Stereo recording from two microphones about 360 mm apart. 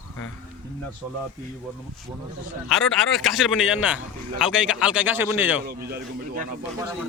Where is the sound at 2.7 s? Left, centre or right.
Centre.